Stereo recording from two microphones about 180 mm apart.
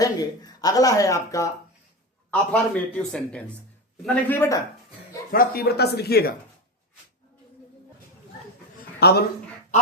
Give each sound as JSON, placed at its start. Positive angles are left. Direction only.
{"t": 0.0, "sound": "speech", "side_deg": 20}
{"t": 2.3, "sound": "a man's voice", "side_deg": 5}
{"t": 5.3, "sound": "speech", "side_deg": 55}
{"t": 9.0, "sound": "speech", "side_deg": 60}